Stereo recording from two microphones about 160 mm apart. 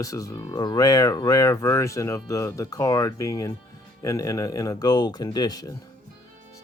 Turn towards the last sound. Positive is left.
turn(degrees=25)  # may be behind; listen again after turning